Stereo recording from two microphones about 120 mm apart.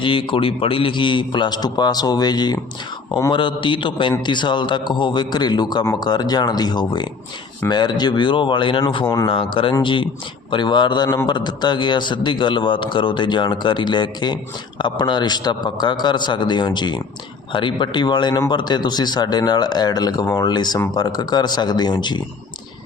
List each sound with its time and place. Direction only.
0.0 s a man's voice: 45° left (ahead or behind)